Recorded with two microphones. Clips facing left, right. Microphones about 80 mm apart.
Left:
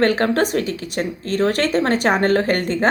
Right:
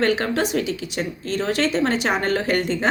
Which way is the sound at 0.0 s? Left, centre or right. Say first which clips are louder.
Left 4 dB; left.